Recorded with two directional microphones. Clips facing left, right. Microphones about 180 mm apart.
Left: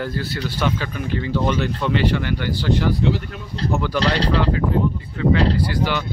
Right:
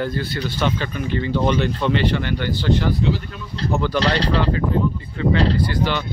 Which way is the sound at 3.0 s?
65° left (ahead or behind).